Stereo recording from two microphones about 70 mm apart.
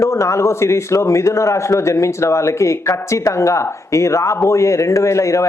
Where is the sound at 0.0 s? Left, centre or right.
Left.